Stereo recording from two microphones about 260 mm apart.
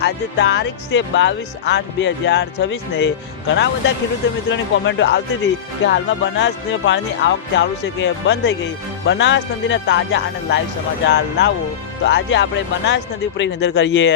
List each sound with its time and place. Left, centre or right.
0.0 s speech: left